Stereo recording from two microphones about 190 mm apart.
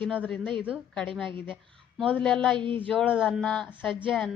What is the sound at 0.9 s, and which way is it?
A woman's voice, 5° left (ahead or behind).